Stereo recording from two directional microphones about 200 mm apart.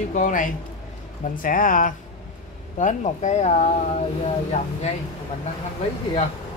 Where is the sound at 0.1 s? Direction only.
40° left (ahead or behind).